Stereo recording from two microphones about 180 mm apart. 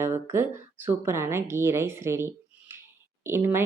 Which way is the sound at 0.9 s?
15° right (ahead or behind).